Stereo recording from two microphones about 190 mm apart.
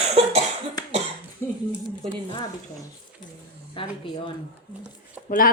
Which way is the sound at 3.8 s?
25° left (ahead or behind).